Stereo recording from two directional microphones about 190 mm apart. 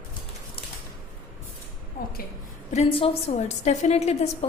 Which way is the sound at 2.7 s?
35° left (ahead or behind).